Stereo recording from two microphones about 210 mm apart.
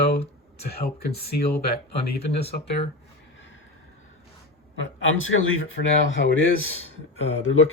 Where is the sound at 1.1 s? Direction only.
50° left (ahead or behind).